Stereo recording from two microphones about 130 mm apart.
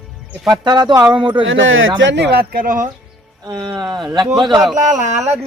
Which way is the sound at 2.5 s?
90° right.